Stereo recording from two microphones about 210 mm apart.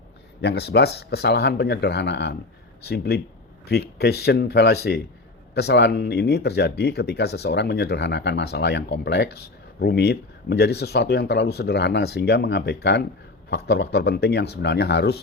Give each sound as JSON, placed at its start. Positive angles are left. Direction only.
{"t": 0.4, "sound": "speech", "side_deg": 50}